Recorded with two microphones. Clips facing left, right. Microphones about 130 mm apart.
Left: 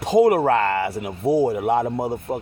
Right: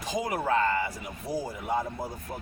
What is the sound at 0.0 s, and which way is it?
A man's voice, 60° left (ahead or behind).